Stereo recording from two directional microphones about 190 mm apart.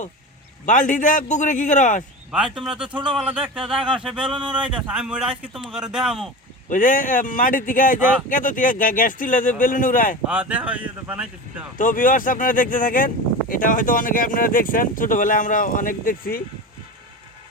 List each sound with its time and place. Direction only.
0.6 s speech: 40° left (ahead or behind)
2.3 s speech: 5° right (ahead or behind)
2.9 s a man's voice: 25° right (ahead or behind)
3.2 s speech: 5° right (ahead or behind)
3.8 s a man's voice: 25° right (ahead or behind)
4.0 s speech: 5° right (ahead or behind)
6.7 s speech: 45° left (ahead or behind)
10.2 s speech: 5° right (ahead or behind)
11.8 s speech: 45° left (ahead or behind)